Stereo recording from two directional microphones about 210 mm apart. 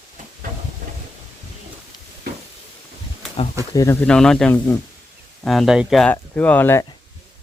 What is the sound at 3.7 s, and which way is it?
Speech, 10° left (ahead or behind).